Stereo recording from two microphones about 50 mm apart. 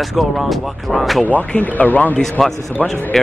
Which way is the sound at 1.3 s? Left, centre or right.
Left.